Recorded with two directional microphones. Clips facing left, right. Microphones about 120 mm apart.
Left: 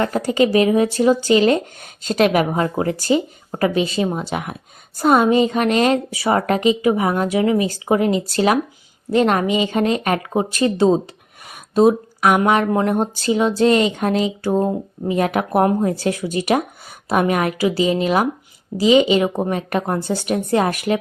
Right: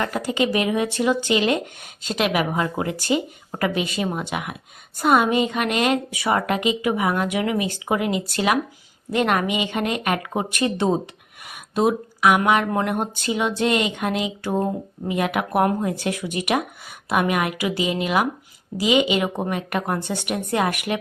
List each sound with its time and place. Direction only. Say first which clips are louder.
0.0 s speech: left 5 dB; 35° left (ahead or behind)